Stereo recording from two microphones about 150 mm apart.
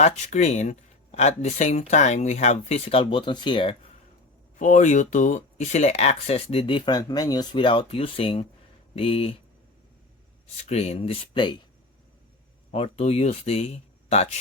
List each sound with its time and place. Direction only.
0.0 s speech: 50° left (ahead or behind); by 3.8 s 35° left (ahead or behind)
4.5 s speech: 55° left (ahead or behind); by 9.3 s 40° left (ahead or behind)
10.7 s speech: 45° left (ahead or behind)
12.7 s speech: 45° left (ahead or behind)